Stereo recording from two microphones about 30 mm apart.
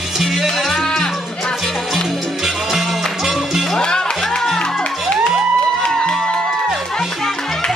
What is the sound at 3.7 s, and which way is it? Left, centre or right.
Music, left.